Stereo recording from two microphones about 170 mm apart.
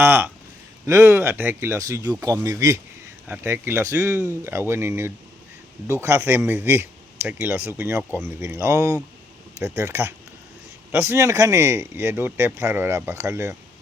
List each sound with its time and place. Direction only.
0.0 s a man's voice: 15° right (ahead or behind)